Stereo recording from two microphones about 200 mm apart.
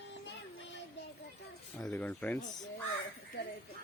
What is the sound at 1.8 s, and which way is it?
Speech, 10° left (ahead or behind).